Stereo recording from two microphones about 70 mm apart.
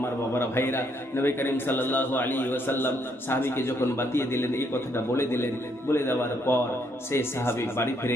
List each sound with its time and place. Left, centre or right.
0.0 s a man's voice: left